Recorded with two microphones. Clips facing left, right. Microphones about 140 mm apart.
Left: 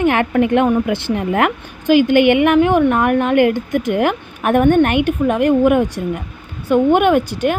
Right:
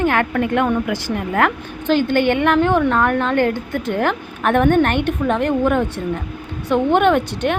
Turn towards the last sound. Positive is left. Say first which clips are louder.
# left 2 dB
turn(degrees=10)  # may be behind; listen again after turning